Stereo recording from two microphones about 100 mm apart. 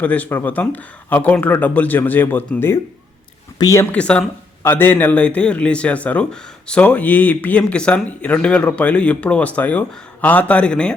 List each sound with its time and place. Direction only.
0.0 s speech: 15° left (ahead or behind)
3.6 s speech: 35° left (ahead or behind)
3.9 s speech: 10° left (ahead or behind)